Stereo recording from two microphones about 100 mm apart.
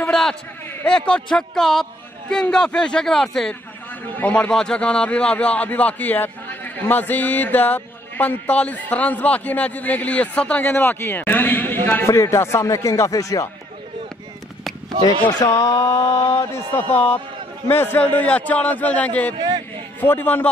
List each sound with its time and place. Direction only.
0.0 s a sound: 5° left (ahead or behind)
0.8 s a man's voice: 10° left (ahead or behind)
12.1 s music: 30° left (ahead or behind)
15.3 s music: 40° left (ahead or behind)
16.2 s a man's voice: 30° left (ahead or behind); by 19.3 s 15° left (ahead or behind)
19.3 s a man's voice: 50° right (ahead or behind)
20.0 s a man's voice: 20° left (ahead or behind)